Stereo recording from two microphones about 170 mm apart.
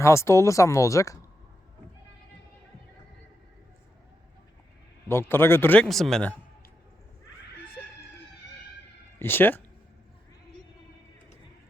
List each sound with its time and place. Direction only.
0.0 s a man's voice: 15° left (ahead or behind)
5.0 s a man's voice: 15° left (ahead or behind)
9.1 s speech: 15° left (ahead or behind)